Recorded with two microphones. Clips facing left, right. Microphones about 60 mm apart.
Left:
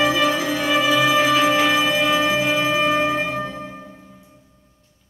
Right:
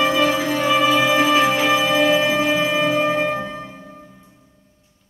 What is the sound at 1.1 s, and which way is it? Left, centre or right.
Music, right.